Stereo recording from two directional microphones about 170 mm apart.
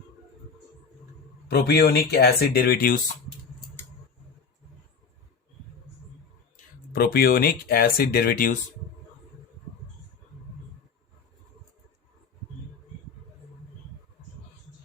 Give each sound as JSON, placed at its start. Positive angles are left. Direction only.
{"t": 1.5, "sound": "speech", "side_deg": 70}
{"t": 6.9, "sound": "speech", "side_deg": 65}